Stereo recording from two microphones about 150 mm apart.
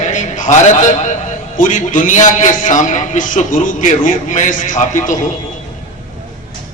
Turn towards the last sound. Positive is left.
turn(degrees=55)  # may be behind; listen again after turning